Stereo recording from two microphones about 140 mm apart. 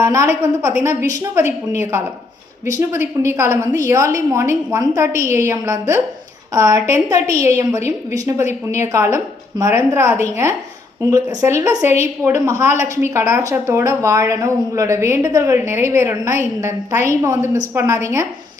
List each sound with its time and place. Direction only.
0.0 s a woman's voice: 20° right (ahead or behind)
11.1 s a woman's voice: 30° right (ahead or behind)